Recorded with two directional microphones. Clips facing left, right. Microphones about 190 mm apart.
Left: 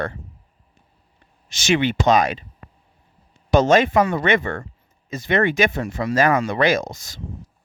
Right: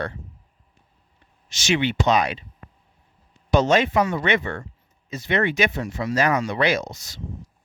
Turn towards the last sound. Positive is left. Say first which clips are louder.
# left 3 dB
turn(degrees=50)  # may be behind; listen again after turning